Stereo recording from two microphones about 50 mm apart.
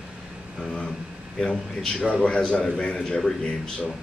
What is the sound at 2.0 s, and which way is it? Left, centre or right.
Speech, left.